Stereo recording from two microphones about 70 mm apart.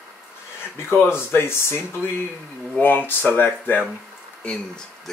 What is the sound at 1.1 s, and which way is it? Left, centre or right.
Speech, left.